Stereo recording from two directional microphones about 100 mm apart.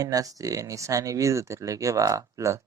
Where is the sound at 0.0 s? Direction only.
35° right (ahead or behind).